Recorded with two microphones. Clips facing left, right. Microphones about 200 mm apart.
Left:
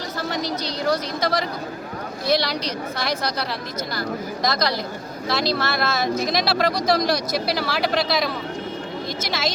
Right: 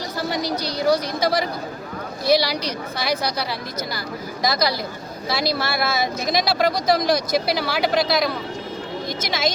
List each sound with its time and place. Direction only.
0.9 s speech: 5° right (ahead or behind)
4.4 s speech: 5° right (ahead or behind)